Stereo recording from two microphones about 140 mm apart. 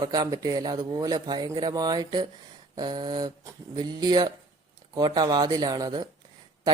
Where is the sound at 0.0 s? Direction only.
30° right (ahead or behind).